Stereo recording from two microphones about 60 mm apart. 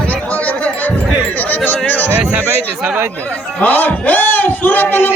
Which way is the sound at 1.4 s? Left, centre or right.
Left.